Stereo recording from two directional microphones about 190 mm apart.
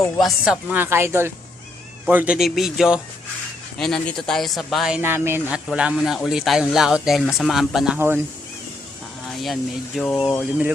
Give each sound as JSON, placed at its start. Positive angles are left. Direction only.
{"t": 0.2, "sound": "speech", "side_deg": 0}
{"t": 9.4, "sound": "speech", "side_deg": 0}